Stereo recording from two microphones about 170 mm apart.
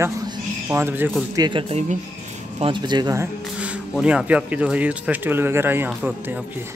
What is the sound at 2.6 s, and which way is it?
Speech, 25° right (ahead or behind).